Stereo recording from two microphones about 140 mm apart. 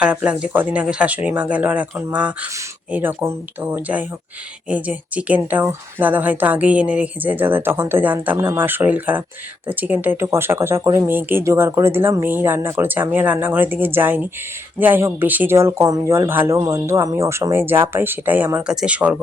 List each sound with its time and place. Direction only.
0.0 s speech: 5° right (ahead or behind)